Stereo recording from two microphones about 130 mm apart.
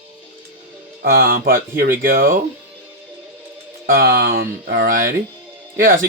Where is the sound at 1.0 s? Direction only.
90° right.